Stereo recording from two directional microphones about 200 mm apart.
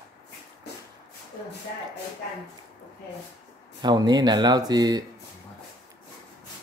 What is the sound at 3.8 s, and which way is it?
Speech, 20° right (ahead or behind).